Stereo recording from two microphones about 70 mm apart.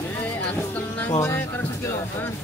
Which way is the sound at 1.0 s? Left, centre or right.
Left.